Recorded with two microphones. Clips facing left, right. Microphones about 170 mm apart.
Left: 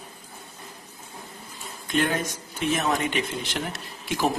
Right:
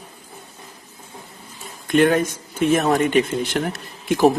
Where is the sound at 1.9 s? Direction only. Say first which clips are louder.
Right 9 dB; 60° right (ahead or behind).